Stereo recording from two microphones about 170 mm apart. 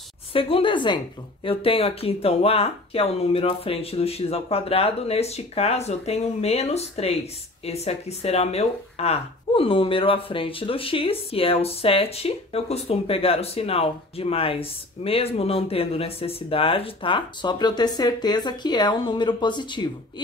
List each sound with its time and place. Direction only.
0.3 s speech: 30° left (ahead or behind)